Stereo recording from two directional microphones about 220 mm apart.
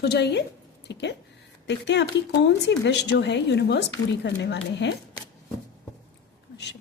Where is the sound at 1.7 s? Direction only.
50° left (ahead or behind).